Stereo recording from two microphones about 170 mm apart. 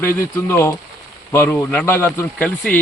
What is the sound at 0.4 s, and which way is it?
Speech, 15° left (ahead or behind).